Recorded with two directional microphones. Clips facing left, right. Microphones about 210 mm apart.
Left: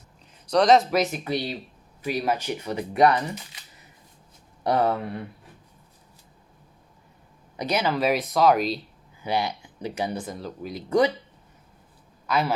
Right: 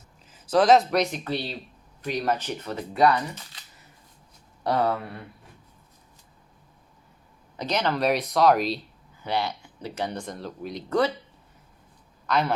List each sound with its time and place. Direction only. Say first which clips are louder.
0.3 s speech: even; 5° right (ahead or behind); by 3.6 s 15° left (ahead or behind)
4.6 s speech: left 2 dB; 15° left (ahead or behind)
7.5 s speech: left 1 dB; 10° left (ahead or behind)
9.2 s speech: left 1 dB; 10° left (ahead or behind)
12.2 s a man's voice: even; 5° left (ahead or behind)